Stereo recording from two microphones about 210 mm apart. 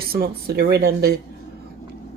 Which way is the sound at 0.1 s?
45° right (ahead or behind).